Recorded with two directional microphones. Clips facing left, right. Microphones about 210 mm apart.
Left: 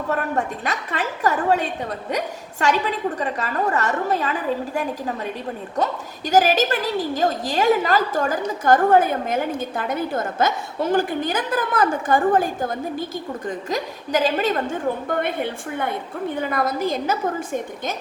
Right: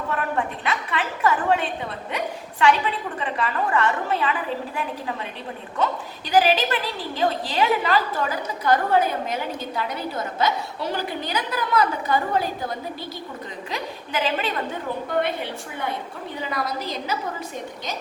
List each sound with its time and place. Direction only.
0.1 s a woman's voice: 45° left (ahead or behind)